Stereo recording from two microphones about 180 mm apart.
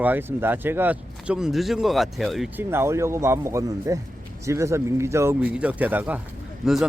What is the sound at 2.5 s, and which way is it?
Speech, 15° right (ahead or behind).